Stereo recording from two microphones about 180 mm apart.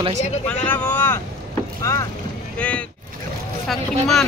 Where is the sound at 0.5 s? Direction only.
10° left (ahead or behind).